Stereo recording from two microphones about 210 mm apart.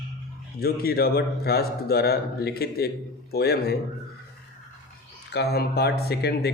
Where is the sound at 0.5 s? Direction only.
45° left (ahead or behind).